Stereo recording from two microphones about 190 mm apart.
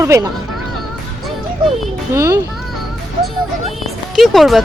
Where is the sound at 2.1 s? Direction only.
15° right (ahead or behind).